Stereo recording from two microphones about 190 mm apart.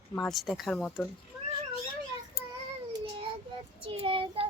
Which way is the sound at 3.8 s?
30° right (ahead or behind).